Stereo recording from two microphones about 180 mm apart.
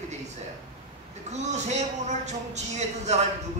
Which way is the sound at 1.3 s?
40° right (ahead or behind).